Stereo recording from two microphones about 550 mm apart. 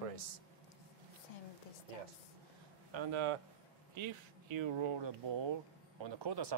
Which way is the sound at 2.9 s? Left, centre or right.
Right.